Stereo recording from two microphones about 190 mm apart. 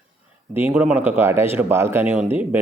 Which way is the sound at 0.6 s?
10° right (ahead or behind).